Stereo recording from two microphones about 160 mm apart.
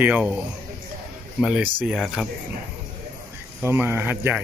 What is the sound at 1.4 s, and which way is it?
Speech, 10° right (ahead or behind).